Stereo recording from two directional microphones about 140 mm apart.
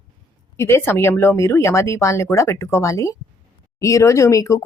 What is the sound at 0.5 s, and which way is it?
Speech, 20° left (ahead or behind).